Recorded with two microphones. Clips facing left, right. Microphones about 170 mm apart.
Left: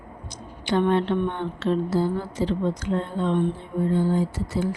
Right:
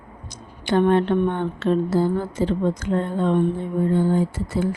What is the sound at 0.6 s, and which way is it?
A woman's voice, 50° right (ahead or behind).